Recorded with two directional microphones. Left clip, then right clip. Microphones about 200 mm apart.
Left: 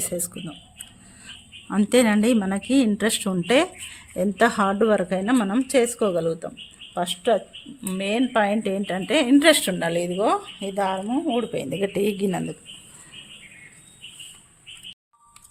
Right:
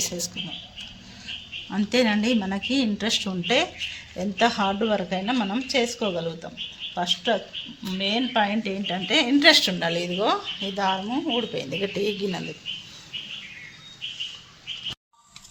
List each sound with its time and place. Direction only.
1.7 s a woman's voice: 55° left (ahead or behind)
10.9 s a woman's voice: 35° left (ahead or behind)
11.3 s a woman's voice: 60° left (ahead or behind)